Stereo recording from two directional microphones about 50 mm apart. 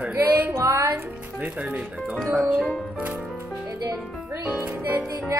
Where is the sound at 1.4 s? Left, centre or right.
Right.